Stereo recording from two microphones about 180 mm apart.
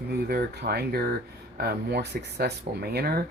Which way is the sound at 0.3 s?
60° right (ahead or behind).